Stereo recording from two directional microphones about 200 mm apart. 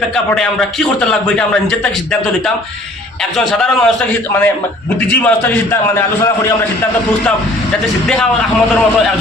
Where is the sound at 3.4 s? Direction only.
Centre (ahead or behind).